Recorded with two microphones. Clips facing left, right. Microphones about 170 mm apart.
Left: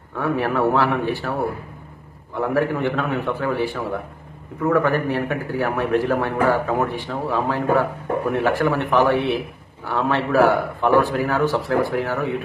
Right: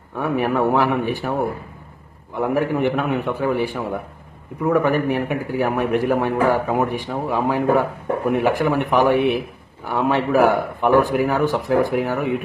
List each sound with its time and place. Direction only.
0.1 s a man's voice: 15° right (ahead or behind)
2.3 s a man's voice: 15° right (ahead or behind)